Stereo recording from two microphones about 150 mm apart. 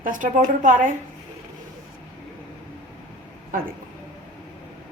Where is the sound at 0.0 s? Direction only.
60° right (ahead or behind).